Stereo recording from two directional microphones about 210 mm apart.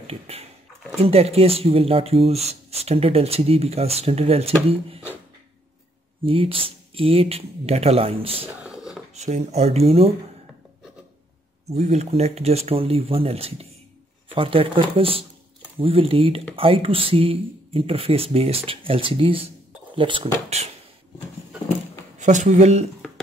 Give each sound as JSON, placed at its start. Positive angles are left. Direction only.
{"t": 0.0, "sound": "speech", "side_deg": -30}
{"t": 6.2, "sound": "speech", "side_deg": -25}
{"t": 8.6, "sound": "a sound", "side_deg": -5}
{"t": 9.1, "sound": "speech", "side_deg": -30}
{"t": 11.7, "sound": "speech", "side_deg": -30}
{"t": 22.2, "sound": "speech", "side_deg": -35}